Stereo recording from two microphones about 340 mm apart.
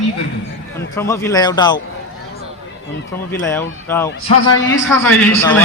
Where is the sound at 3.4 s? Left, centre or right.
Centre.